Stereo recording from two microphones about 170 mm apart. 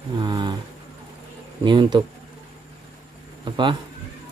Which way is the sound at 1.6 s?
25° right (ahead or behind).